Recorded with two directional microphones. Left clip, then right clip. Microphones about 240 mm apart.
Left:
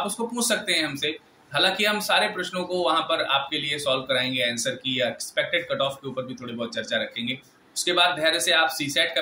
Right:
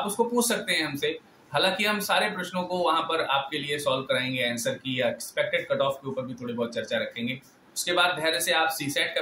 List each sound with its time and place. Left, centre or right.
0.0 s a man's voice: centre